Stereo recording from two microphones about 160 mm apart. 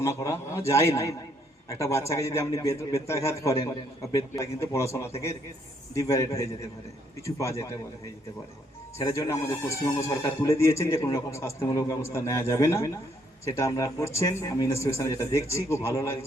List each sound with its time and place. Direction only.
0.0 s speech: 20° left (ahead or behind)
9.1 s speech: 20° left (ahead or behind)